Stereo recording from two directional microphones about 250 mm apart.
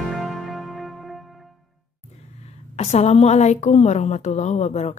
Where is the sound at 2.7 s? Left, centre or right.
Left.